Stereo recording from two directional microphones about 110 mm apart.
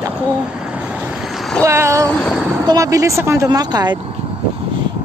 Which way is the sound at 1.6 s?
25° right (ahead or behind).